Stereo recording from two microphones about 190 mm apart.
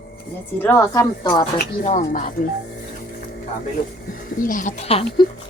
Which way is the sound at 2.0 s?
45° left (ahead or behind).